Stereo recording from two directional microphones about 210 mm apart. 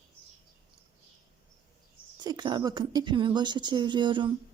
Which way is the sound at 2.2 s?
20° right (ahead or behind).